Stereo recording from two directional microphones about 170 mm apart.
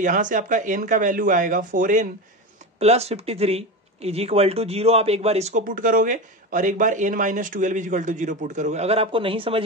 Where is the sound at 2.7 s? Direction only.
40° right (ahead or behind).